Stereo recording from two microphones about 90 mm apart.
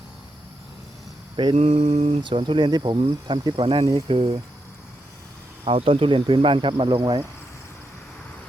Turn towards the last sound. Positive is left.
turn(degrees=-55)  # may be behind; listen again after turning